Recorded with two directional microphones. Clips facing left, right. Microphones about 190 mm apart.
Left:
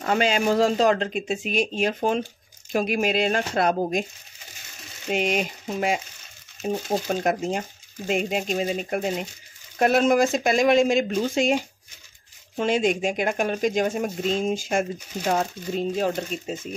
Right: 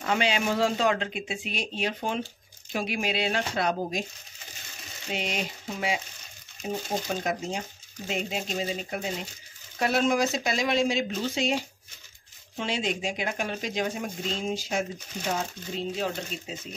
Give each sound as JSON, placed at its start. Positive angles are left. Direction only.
{"t": 0.0, "sound": "speech", "side_deg": 45}
{"t": 5.1, "sound": "speech", "side_deg": 55}